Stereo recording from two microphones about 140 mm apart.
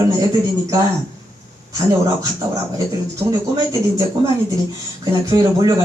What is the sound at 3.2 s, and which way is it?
Speech, 25° right (ahead or behind).